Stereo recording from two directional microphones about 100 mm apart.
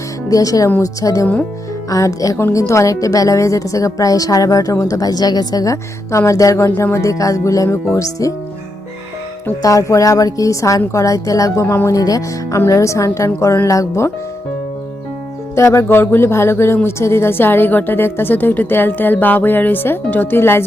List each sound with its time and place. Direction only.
0.3 s a woman's voice: 35° left (ahead or behind)
6.7 s a woman's voice: 20° left (ahead or behind)
9.6 s a woman's voice: 35° left (ahead or behind)
15.5 s speech: 30° left (ahead or behind)